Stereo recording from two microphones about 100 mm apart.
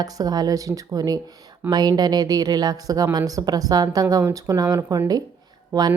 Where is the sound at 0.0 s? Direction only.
40° right (ahead or behind).